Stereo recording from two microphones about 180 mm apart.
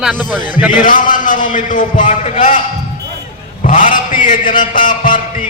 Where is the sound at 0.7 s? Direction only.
45° left (ahead or behind).